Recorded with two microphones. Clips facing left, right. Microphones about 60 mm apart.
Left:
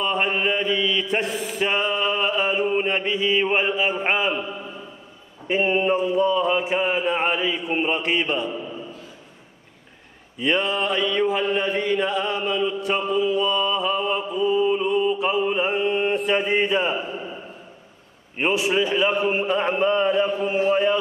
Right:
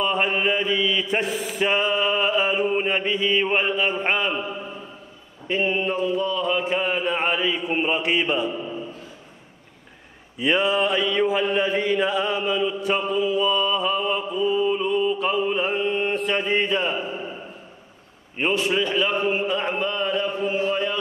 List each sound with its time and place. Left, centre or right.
0.0 s mantra: centre
5.5 s mantra: left; by 8.5 s centre
10.4 s mantra: centre
18.4 s a man's voice: centre